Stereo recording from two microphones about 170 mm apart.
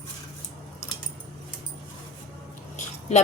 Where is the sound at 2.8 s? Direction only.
45° left (ahead or behind).